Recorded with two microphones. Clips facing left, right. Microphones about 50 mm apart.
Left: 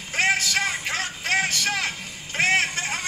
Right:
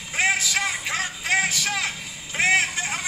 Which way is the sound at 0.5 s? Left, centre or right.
Centre.